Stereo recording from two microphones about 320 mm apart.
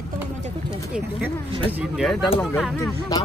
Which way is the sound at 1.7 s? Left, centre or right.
Centre.